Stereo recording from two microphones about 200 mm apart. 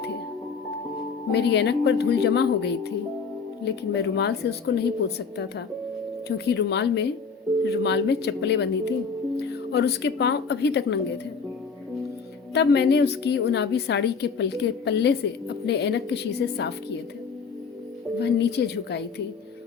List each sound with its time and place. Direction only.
1.3 s a woman's voice: 55° left (ahead or behind)
12.5 s a woman's voice: 55° left (ahead or behind)
18.2 s a woman's voice: 55° left (ahead or behind)